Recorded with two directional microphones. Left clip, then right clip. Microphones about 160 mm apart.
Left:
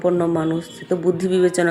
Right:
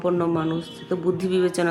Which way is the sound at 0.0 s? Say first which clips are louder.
Left 4 dB; 20° left (ahead or behind).